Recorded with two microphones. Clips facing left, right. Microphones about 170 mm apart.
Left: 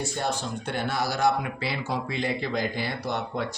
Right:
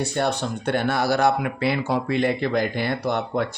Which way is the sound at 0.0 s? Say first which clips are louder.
Right 6 dB; 65° right (ahead or behind).